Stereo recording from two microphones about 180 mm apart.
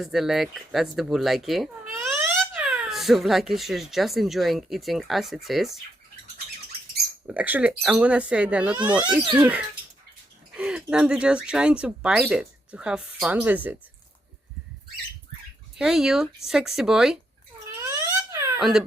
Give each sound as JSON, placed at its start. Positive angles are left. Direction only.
{"t": 0.0, "sound": "speech", "side_deg": 0}
{"t": 7.3, "sound": "speech", "side_deg": -10}
{"t": 15.8, "sound": "speech", "side_deg": -5}
{"t": 17.8, "sound": "a sound", "side_deg": -15}
{"t": 18.6, "sound": "speech", "side_deg": 0}